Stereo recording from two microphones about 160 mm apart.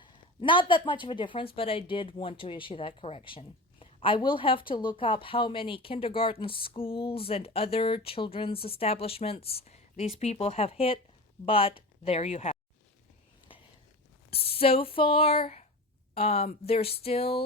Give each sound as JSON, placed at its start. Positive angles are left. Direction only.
{"t": 0.0, "sound": "speech", "side_deg": 30}
{"t": 14.3, "sound": "speech", "side_deg": 35}